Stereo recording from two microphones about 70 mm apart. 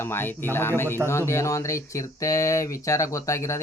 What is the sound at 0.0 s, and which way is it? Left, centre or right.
Speech, left.